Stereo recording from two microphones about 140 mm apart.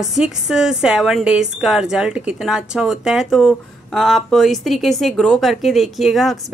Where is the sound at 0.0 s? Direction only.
5° right (ahead or behind).